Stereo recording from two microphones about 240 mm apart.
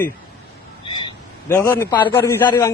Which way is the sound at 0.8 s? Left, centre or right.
Centre.